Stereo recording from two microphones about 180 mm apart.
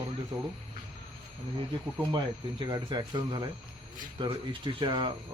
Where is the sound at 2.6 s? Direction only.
25° right (ahead or behind).